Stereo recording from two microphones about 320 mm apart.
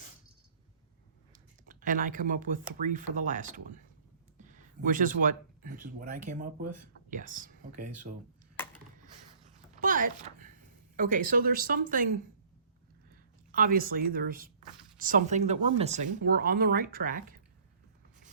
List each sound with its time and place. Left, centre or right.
1.3 s speech: right
9.8 s a sound: right
10.9 s speech: right
13.5 s speech: right